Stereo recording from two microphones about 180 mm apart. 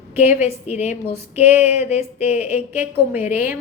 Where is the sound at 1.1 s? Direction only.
10° right (ahead or behind).